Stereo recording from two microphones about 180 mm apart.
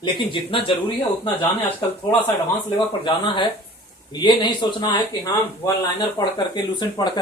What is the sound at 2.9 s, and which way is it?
Speech, 25° left (ahead or behind).